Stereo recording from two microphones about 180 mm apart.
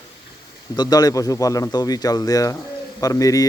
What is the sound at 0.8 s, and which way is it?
A man's voice, 20° left (ahead or behind).